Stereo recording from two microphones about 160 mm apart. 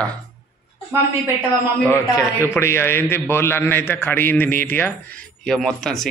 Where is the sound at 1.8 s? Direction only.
15° left (ahead or behind).